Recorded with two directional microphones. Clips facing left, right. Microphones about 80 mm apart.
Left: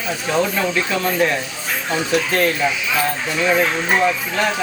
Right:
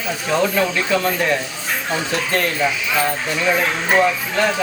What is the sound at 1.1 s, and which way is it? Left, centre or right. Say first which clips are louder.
Speech: left 1 dB; centre.